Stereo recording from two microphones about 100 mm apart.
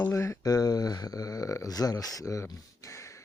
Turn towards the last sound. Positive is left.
turn(degrees=30)  # may be behind; listen again after turning